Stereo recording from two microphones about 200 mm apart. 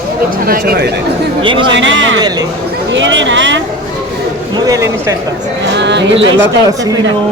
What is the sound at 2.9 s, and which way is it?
Speech, 65° right (ahead or behind).